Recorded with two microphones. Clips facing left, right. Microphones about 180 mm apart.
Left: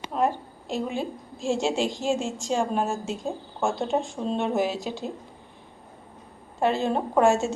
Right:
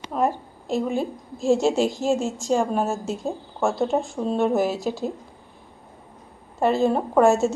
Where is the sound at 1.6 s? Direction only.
40° right (ahead or behind).